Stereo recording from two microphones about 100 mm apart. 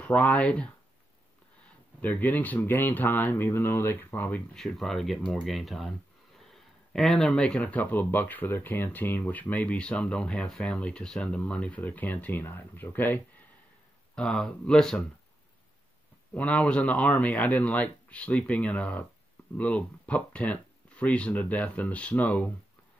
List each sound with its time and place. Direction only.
0.0 s speech: 15° left (ahead or behind)
2.0 s speech: 15° left (ahead or behind)
4.6 s speech: 5° left (ahead or behind)
14.1 s speech: 10° left (ahead or behind)
16.3 s speech: 15° left (ahead or behind)